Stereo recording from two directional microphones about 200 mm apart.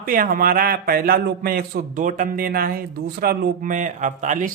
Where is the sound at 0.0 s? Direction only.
45° right (ahead or behind).